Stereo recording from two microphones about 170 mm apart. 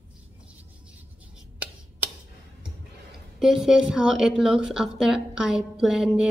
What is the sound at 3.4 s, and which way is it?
A woman's voice, 5° right (ahead or behind).